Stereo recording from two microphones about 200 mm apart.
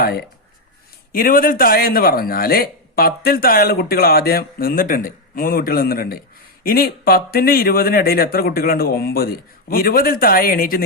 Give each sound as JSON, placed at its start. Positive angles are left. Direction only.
{"t": 0.0, "sound": "a man's voice", "side_deg": 50}